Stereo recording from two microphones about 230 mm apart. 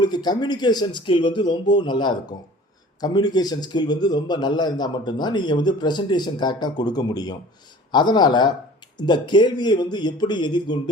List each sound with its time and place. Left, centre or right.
0.0 s a man's voice: centre